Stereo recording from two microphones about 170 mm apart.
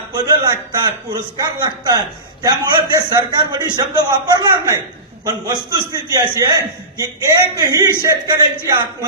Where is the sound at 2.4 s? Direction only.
20° right (ahead or behind).